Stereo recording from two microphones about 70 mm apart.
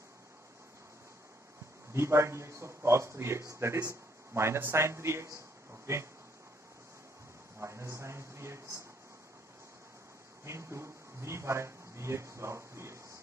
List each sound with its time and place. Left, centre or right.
1.9 s a man's voice: right
5.7 s a sound: right
7.6 s speech: right
10.4 s speech: right